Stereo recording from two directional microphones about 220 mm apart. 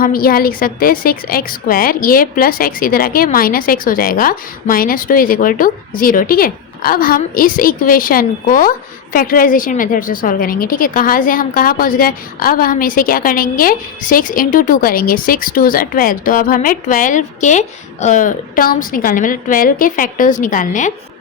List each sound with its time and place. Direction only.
0.0 s a woman's voice: 40° left (ahead or behind)